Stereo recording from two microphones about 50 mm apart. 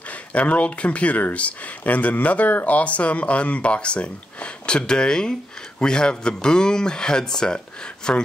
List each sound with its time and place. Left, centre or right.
0.1 s a man's voice: left